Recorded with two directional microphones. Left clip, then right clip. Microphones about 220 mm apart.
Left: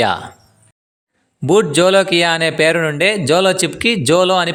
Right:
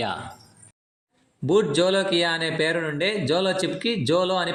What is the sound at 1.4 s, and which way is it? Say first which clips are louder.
A man's voice: left 8 dB; 55° left (ahead or behind).